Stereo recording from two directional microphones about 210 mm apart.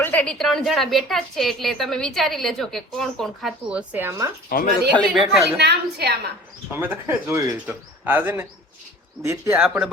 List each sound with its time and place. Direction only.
0.0 s a woman's voice: 5° left (ahead or behind); by 4.3 s 10° right (ahead or behind)
4.4 s speech: 40° left (ahead or behind)
4.9 s a woman's voice: centre (ahead or behind)
5.5 s a woman's voice: 50° right (ahead or behind)
6.7 s speech: 10° right (ahead or behind)